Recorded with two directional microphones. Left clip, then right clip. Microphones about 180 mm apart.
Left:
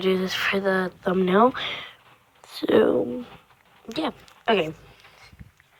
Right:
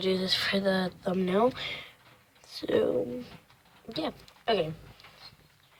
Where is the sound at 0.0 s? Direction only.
10° left (ahead or behind).